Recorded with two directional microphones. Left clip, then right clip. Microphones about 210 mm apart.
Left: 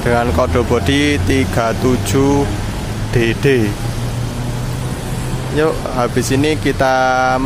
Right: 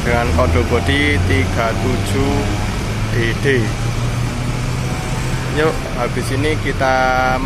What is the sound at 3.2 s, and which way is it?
Speech, 35° left (ahead or behind).